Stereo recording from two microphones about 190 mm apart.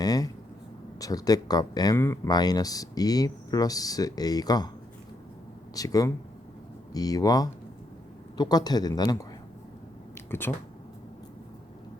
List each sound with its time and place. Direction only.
0.0 s a sound: 20° left (ahead or behind)
0.9 s speech: 20° left (ahead or behind)
5.7 s speech: 20° left (ahead or behind)
10.5 s speech: 10° left (ahead or behind)